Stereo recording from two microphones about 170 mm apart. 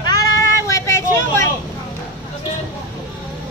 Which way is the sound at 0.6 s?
15° left (ahead or behind).